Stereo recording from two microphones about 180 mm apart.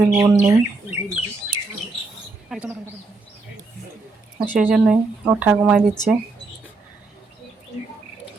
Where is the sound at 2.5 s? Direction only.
5° right (ahead or behind).